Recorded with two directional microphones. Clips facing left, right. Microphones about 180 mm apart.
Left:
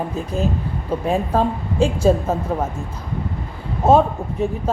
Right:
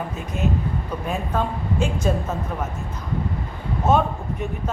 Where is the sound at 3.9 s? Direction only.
30° left (ahead or behind).